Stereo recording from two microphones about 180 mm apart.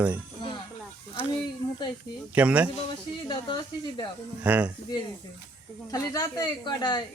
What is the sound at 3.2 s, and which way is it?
Speech, 25° left (ahead or behind).